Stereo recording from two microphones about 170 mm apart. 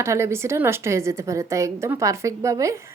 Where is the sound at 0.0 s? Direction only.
15° right (ahead or behind).